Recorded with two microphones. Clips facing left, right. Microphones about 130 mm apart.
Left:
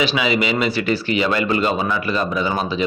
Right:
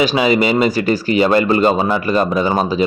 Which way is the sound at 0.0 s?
40° right (ahead or behind).